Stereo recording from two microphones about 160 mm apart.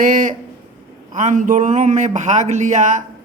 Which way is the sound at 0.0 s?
55° right (ahead or behind).